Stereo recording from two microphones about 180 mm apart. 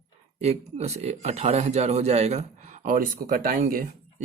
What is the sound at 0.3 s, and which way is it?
Speech, 35° right (ahead or behind).